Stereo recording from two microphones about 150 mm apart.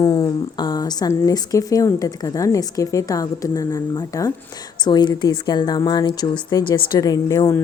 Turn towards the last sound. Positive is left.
turn(degrees=25)  # may be behind; listen again after turning